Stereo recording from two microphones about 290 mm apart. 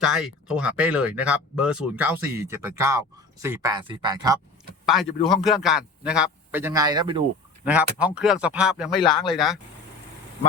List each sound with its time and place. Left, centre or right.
0.0 s speech: centre
5.3 s speech: centre
7.6 s speech: centre